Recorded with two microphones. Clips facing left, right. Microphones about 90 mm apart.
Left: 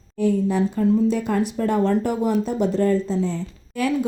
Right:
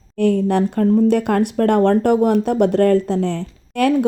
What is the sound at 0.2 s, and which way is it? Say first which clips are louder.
Speech: right 4 dB; 65° right (ahead or behind).